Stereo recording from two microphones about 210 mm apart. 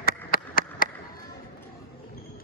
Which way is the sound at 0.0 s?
45° left (ahead or behind).